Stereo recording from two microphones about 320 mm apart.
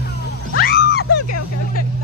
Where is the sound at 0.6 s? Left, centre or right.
Left.